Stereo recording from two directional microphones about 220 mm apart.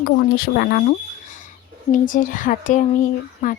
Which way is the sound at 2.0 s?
40° left (ahead or behind).